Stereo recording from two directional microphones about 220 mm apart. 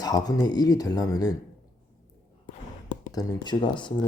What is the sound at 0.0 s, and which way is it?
Speech, 15° left (ahead or behind).